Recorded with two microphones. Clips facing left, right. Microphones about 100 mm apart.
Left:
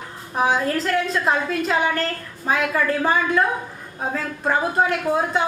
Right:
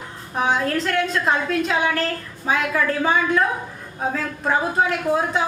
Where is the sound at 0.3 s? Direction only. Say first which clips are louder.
Left 1 dB; centre (ahead or behind).